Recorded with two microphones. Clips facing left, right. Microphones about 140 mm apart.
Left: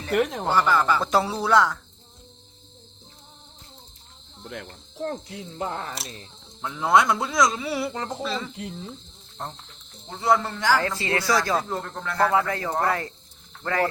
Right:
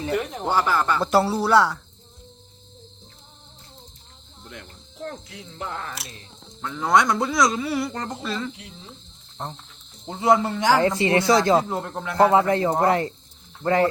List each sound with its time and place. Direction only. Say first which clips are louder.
0.1 s speech: left 5 dB; 80° left
0.5 s speech: even; 5° right (ahead or behind)
4.4 s cricket: left 5 dB; 55° left (ahead or behind)
4.9 s speech: left 4 dB; 30° left (ahead or behind)
6.6 s speech: even; 5° left (ahead or behind)
10.1 s a man's voice: right 3 dB; 20° right (ahead or behind)